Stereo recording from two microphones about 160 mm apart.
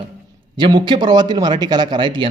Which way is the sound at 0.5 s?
30° right (ahead or behind).